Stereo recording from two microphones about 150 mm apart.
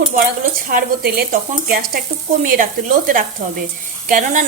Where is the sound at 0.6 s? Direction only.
75° right (ahead or behind).